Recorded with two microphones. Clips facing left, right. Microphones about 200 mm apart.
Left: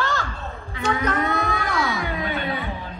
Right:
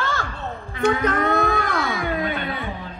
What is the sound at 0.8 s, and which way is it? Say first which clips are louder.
Music: right 3 dB; 50° right (ahead or behind).